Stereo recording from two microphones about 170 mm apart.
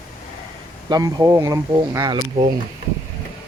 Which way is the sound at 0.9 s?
20° right (ahead or behind).